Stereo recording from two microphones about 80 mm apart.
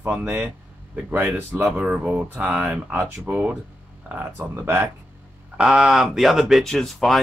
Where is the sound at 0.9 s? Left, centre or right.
Right.